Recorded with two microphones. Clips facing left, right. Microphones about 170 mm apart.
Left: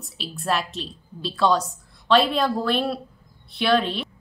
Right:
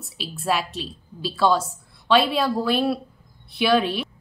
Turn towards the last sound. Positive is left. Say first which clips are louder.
# right 1 dB
turn(degrees=-10)  # may be behind; listen again after turning